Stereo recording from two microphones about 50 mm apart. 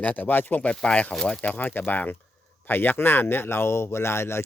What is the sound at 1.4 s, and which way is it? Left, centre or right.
Speech, left.